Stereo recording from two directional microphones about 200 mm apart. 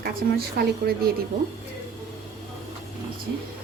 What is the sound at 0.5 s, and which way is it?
Speech, 50° right (ahead or behind).